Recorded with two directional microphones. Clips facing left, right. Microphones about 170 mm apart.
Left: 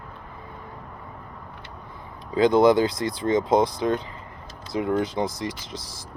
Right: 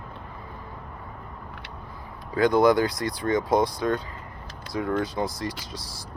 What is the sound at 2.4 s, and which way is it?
Speech, 20° left (ahead or behind).